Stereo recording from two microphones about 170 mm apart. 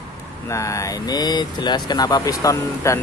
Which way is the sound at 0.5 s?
20° left (ahead or behind).